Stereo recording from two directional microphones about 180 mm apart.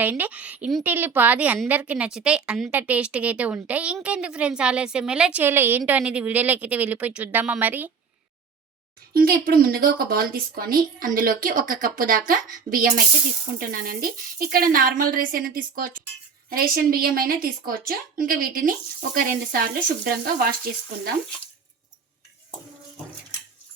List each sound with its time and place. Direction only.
0.0 s a woman's voice: 10° right (ahead or behind)
9.1 s a woman's voice: 55° right (ahead or behind)